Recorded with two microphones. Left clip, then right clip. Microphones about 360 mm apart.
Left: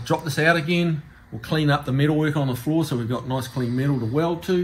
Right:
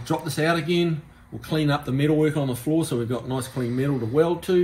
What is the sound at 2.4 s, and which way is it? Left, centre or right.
Speech, centre.